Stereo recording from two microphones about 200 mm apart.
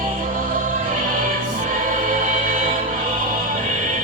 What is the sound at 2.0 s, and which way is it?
Music, 45° right (ahead or behind).